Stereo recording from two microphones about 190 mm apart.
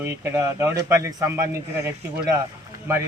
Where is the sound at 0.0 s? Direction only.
15° right (ahead or behind).